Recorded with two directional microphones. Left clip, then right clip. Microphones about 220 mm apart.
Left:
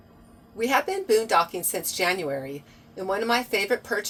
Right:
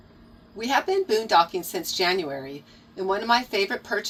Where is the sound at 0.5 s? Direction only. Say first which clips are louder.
Right 1 dB; 25° left (ahead or behind).